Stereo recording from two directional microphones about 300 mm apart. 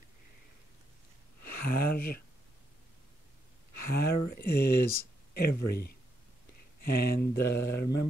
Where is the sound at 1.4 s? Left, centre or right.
Left.